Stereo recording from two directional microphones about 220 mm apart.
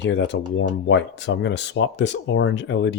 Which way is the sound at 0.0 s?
55° left (ahead or behind).